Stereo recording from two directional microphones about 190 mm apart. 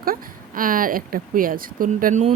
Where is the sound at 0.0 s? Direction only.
50° right (ahead or behind).